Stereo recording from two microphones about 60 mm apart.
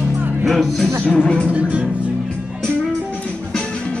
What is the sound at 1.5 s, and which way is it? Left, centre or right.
Music, right.